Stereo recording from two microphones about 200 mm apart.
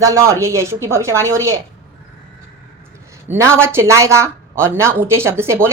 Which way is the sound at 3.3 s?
15° right (ahead or behind).